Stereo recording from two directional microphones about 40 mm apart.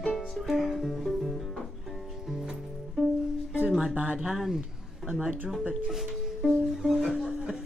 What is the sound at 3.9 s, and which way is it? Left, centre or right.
Speech, right.